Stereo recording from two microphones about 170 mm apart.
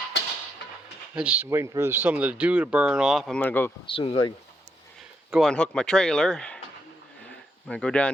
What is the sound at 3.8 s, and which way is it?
Speech, 35° left (ahead or behind).